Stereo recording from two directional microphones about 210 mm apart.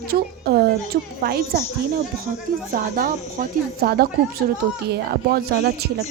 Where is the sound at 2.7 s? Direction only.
40° right (ahead or behind).